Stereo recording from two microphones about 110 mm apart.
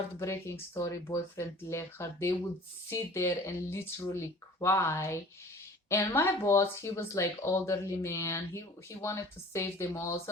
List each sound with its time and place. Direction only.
0.2 s speech: 25° left (ahead or behind)